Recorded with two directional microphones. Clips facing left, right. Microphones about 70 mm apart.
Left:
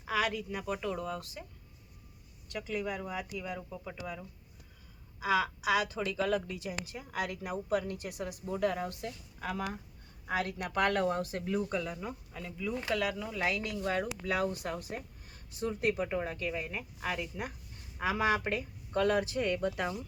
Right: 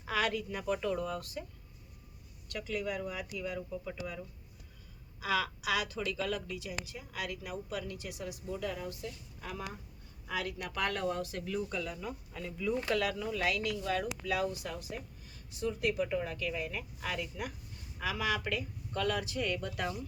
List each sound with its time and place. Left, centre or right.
0.0 s speech: centre
2.5 s a woman's voice: centre; by 9.7 s left
10.2 s a woman's voice: left
12.3 s speech: centre
13.4 s a woman's voice: left
16.0 s speech: left